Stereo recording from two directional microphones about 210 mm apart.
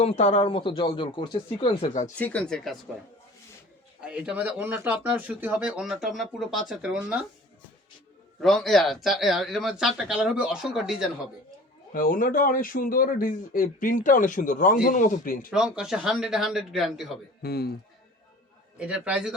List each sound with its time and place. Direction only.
0.0 s speech: 30° left (ahead or behind)
2.1 s speech: 5° left (ahead or behind)
4.0 s speech: 5° right (ahead or behind)
8.4 s speech: centre (ahead or behind)
11.9 s a man's voice: 40° left (ahead or behind)
15.5 s speech: 5° right (ahead or behind)
17.4 s speech: 50° left (ahead or behind)
18.8 s speech: 5° right (ahead or behind)